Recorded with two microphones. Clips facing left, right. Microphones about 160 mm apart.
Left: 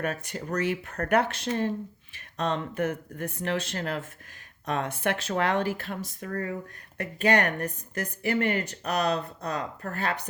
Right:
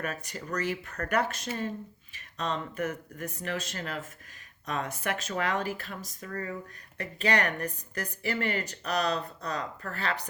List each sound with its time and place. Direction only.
0.2 s speech: 55° left (ahead or behind)